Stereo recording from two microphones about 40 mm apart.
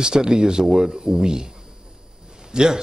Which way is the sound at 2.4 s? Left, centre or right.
Centre.